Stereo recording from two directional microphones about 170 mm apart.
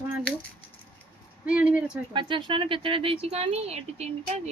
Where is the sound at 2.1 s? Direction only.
30° right (ahead or behind).